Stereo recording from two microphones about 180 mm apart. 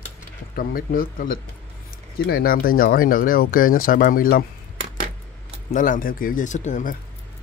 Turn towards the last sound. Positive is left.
turn(degrees=45)  # may be behind; listen again after turning